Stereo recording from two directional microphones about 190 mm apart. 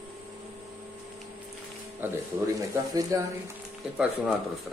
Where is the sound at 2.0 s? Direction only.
15° right (ahead or behind).